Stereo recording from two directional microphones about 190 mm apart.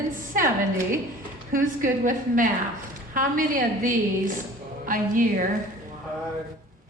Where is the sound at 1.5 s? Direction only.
45° right (ahead or behind).